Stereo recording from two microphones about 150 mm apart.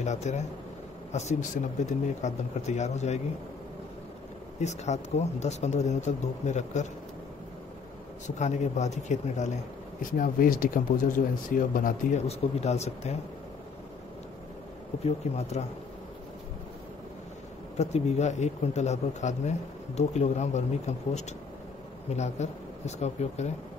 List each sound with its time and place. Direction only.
0.0 s speech: 50° left (ahead or behind)
4.6 s speech: 50° left (ahead or behind)
8.4 s speech: 50° left (ahead or behind)
10.1 s speech: 65° left (ahead or behind)
12.3 s speech: 45° left (ahead or behind)
15.0 s speech: 45° left (ahead or behind)
17.7 s speech: 45° left (ahead or behind)